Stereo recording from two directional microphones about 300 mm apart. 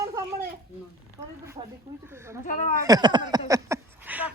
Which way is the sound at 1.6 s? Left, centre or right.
Centre.